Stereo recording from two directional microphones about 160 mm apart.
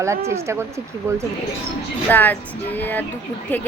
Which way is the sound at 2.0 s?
10° left (ahead or behind).